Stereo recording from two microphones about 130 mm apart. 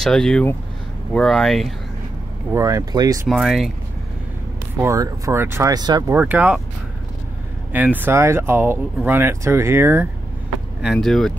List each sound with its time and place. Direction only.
0.0 s speech: 5° left (ahead or behind)
2.5 s speech: 25° right (ahead or behind)
3.3 s speech: centre (ahead or behind)
4.8 s speech: 25° right (ahead or behind)
6.1 s speech: 15° right (ahead or behind)
7.7 s speech: 15° right (ahead or behind)
10.8 s speech: centre (ahead or behind)